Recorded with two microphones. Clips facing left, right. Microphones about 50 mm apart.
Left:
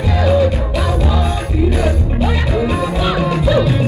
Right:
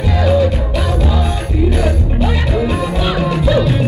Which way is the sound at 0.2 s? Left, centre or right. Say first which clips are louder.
Even; left.